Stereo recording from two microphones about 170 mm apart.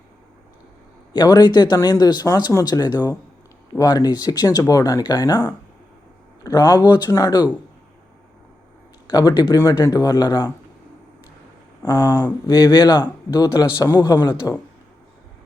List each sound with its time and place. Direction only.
1.1 s speech: 25° left (ahead or behind)
9.0 s speech: 25° left (ahead or behind)
11.8 s speech: 25° left (ahead or behind)